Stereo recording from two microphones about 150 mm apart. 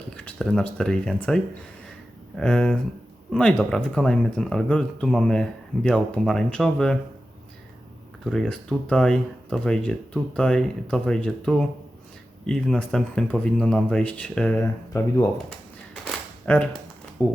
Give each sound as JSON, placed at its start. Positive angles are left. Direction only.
{"t": 0.1, "sound": "speech", "side_deg": 5}
{"t": 2.4, "sound": "speech", "side_deg": 5}
{"t": 8.2, "sound": "speech", "side_deg": 0}
{"t": 16.5, "sound": "speech", "side_deg": 10}